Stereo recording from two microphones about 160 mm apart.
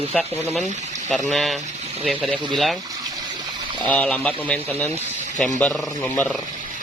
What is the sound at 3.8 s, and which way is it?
Speech, 10° left (ahead or behind).